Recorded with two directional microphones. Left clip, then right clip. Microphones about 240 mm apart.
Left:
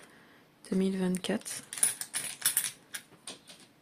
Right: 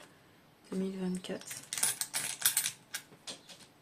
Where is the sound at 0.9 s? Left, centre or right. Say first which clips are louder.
Left 7 dB; left.